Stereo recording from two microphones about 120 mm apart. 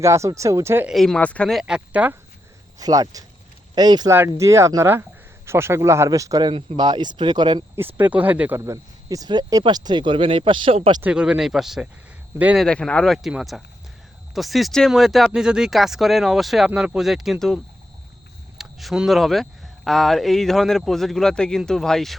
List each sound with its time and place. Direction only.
0.0 s speech: 25° right (ahead or behind)
0.9 s speech: 5° left (ahead or behind)
2.7 s speech: 30° right (ahead or behind)
4.1 s speech: 20° right (ahead or behind); by 7.6 s 40° right (ahead or behind)
7.8 s speech: 15° right (ahead or behind); by 10.8 s 45° right (ahead or behind)
11.0 s speech: 5° right (ahead or behind)